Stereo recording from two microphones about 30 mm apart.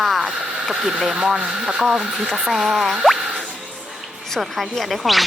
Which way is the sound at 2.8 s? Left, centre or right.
Centre.